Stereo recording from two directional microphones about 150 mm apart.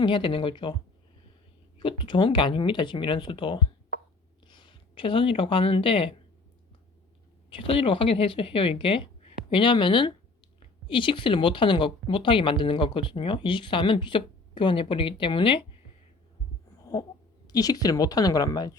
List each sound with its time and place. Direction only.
0.0 s speech: 35° left (ahead or behind)
1.8 s speech: 35° left (ahead or behind)
7.5 s speech: 35° left (ahead or behind)
16.8 s speech: 20° left (ahead or behind)